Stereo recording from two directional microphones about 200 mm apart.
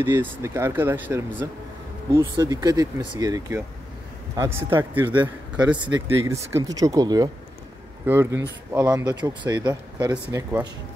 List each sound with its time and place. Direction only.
0.0 s speech: 10° right (ahead or behind)
2.1 s speech: 20° right (ahead or behind)